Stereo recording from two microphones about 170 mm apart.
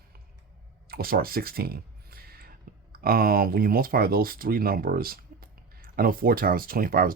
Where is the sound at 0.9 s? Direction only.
60° right (ahead or behind).